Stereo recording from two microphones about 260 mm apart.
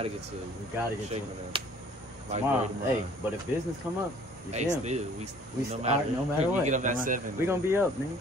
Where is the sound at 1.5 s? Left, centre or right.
Centre.